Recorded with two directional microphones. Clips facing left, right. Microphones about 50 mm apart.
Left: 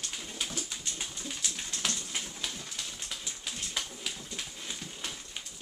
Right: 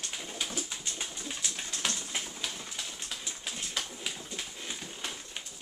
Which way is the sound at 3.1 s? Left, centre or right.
Centre.